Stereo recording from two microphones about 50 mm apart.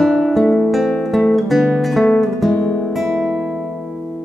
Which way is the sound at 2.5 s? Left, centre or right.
Left.